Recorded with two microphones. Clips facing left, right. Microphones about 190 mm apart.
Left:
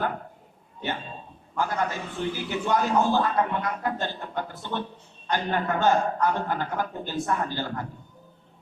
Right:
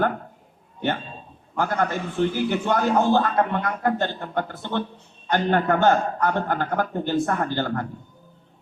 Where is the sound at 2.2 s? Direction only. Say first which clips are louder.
Right 7 dB; 65° right (ahead or behind).